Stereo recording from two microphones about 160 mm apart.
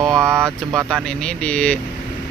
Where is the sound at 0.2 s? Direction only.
15° right (ahead or behind).